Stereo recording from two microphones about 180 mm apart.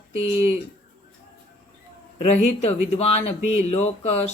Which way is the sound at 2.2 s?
35° left (ahead or behind).